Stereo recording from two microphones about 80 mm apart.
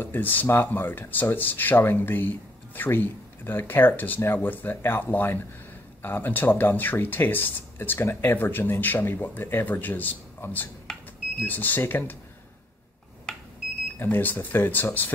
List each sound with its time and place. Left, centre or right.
0.0 s speech: left
13.9 s speech: left